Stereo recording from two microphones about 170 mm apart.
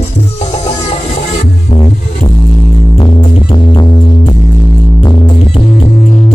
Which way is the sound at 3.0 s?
30° left (ahead or behind).